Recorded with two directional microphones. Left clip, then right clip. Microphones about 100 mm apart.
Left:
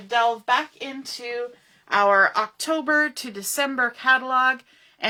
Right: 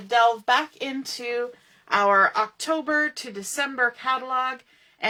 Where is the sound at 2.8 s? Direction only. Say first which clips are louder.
Left 3 dB; 50° left (ahead or behind).